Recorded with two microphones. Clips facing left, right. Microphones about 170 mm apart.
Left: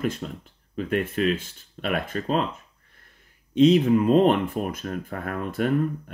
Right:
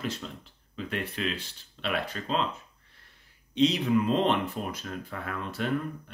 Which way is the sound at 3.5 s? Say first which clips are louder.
Left 7 dB; 50° left (ahead or behind).